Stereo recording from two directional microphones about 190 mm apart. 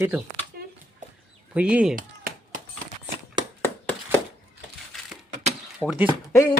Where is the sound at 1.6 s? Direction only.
5° right (ahead or behind).